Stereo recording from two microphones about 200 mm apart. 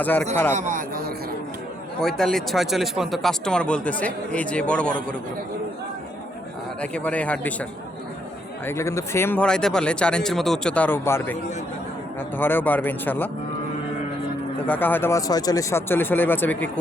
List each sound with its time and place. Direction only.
0.0 s speech: 10° left (ahead or behind)
0.5 s speech: 40° right (ahead or behind)
2.0 s speech: centre (ahead or behind)
6.8 s speech: 5° left (ahead or behind)
12.4 s speech: 10° left (ahead or behind)
14.7 s speech: 10° left (ahead or behind)